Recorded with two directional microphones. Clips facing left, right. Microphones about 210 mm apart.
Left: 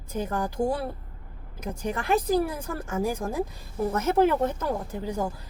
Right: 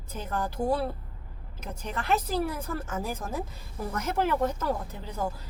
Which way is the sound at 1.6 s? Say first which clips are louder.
Left 5 dB; 15° left (ahead or behind).